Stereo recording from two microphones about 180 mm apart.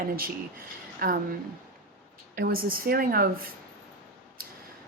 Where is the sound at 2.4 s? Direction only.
55° right (ahead or behind).